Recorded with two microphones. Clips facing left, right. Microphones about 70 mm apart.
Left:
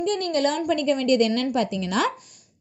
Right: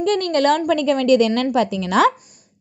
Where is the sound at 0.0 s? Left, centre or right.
Right.